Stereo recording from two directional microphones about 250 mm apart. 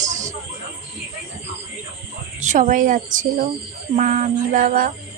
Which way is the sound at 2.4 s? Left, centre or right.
Right.